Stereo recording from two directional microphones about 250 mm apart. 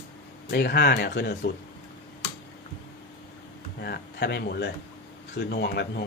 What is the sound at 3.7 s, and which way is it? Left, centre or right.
Speech, left.